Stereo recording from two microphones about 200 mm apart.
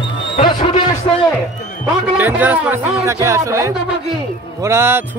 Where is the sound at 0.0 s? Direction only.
25° left (ahead or behind).